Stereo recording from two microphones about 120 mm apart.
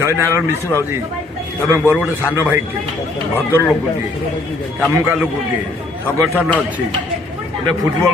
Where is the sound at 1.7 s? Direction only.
15° right (ahead or behind).